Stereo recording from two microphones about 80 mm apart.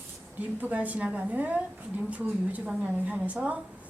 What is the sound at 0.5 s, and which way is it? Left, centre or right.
A woman's voice, centre.